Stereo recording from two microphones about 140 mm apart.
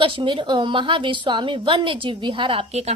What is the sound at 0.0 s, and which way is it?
A woman's voice, 35° right (ahead or behind).